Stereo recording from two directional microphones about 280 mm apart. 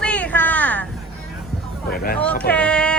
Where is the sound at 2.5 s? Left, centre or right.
Centre.